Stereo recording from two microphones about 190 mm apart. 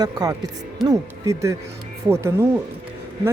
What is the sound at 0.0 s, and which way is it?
Speech, 20° right (ahead or behind).